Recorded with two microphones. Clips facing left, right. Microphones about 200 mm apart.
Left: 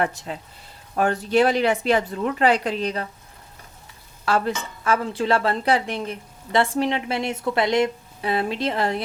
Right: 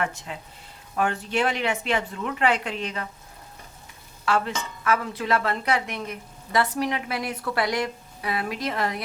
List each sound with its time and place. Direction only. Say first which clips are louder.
0.0 s speech: left 4 dB; 35° left (ahead or behind)
4.3 s speech: left 3 dB; 35° left (ahead or behind)